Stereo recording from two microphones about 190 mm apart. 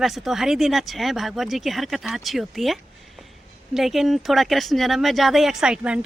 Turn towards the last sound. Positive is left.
turn(degrees=-5)  # may be behind; listen again after turning